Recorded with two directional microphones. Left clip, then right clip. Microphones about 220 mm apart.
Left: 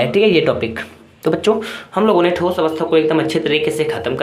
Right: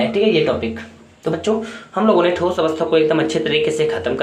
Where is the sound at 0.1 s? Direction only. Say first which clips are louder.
Left 3 dB; 50° left (ahead or behind).